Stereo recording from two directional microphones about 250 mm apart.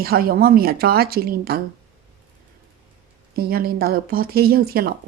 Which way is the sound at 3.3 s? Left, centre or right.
Right.